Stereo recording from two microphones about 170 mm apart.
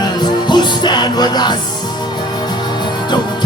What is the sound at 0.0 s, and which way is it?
Music, 25° left (ahead or behind).